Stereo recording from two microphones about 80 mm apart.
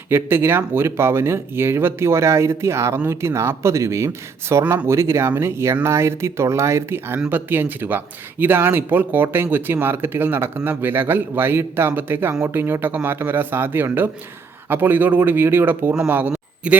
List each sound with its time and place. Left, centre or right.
0.1 s a man's voice: right